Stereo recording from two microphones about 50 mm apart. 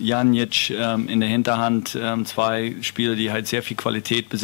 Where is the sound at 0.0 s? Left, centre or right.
Centre.